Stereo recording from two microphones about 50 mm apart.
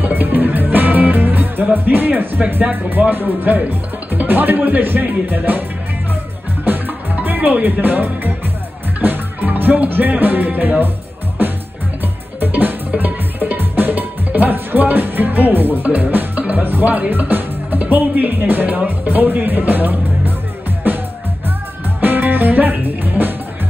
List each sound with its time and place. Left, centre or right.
0.0 s music: right
3.1 s speech: right
7.2 s music: right
7.8 s speech: right
9.0 s music: right
12.4 s music: right
16.6 s speech: right
22.0 s music: right